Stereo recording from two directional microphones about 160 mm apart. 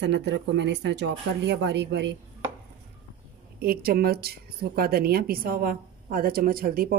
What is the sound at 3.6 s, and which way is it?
A woman's voice, 70° right (ahead or behind).